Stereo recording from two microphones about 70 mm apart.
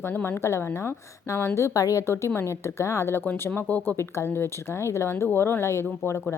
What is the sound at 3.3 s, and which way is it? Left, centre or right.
Speech, left.